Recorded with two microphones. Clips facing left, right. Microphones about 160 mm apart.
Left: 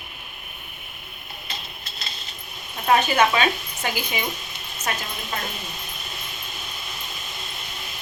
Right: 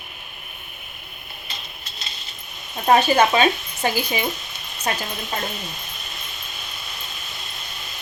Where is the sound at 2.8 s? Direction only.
35° right (ahead or behind).